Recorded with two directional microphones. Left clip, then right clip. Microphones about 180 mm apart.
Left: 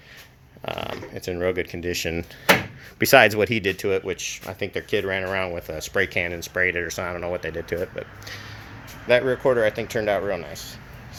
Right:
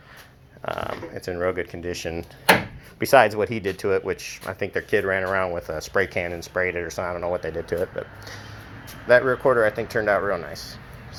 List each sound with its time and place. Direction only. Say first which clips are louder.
0.6 s a sound: right 1 dB; 30° left (ahead or behind)
1.2 s speech: left 1 dB; 35° left (ahead or behind)
1.9 s speech: left 3 dB; 50° left (ahead or behind); by 3.8 s 35° left (ahead or behind)
3.8 s speech: right 1 dB; 10° left (ahead or behind)
6.1 s speech: left 1 dB; 20° left (ahead or behind)
7.4 s speech: right 1 dB; 10° left (ahead or behind)